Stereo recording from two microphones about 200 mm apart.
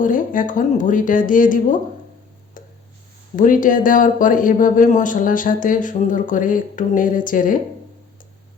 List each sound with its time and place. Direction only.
0.0 s speech: 40° left (ahead or behind)
3.3 s speech: 40° left (ahead or behind)